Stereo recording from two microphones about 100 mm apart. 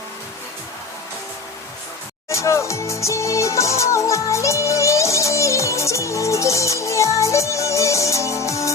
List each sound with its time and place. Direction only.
2.3 s music: 30° left (ahead or behind)